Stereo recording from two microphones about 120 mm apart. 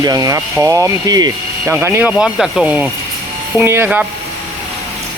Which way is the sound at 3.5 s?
20° right (ahead or behind).